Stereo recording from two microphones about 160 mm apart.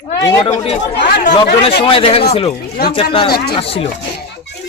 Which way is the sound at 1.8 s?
35° left (ahead or behind).